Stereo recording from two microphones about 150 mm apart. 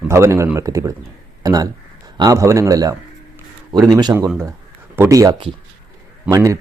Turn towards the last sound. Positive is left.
turn(degrees=-20)  # may be behind; listen again after turning